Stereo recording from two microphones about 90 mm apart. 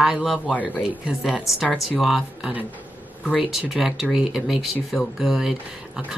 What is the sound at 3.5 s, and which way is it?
Speech, centre (ahead or behind).